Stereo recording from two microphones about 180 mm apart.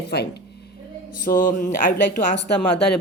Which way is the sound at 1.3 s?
50° left (ahead or behind).